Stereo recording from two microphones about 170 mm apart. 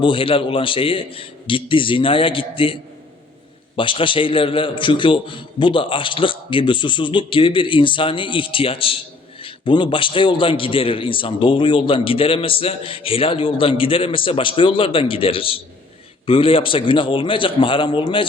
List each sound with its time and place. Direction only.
0.0 s a man's voice: 30° left (ahead or behind)
3.8 s a man's voice: 30° left (ahead or behind)